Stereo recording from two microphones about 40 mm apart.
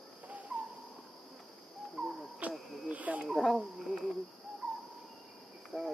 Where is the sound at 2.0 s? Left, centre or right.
Centre.